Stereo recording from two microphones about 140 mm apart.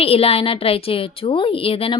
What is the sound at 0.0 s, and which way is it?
Speech, 45° left (ahead or behind).